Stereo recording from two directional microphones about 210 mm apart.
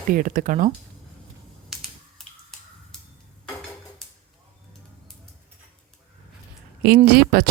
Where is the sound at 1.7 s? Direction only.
Centre (ahead or behind).